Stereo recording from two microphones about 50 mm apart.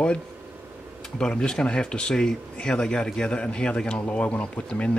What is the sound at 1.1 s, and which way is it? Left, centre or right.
Speech, centre.